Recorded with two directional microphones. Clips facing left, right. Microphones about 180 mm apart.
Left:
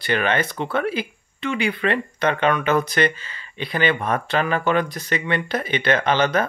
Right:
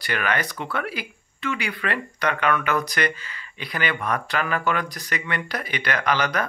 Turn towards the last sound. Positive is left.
turn(degrees=25)  # may be behind; listen again after turning